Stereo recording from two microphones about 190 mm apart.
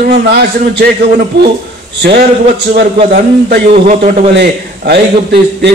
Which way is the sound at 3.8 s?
40° right (ahead or behind).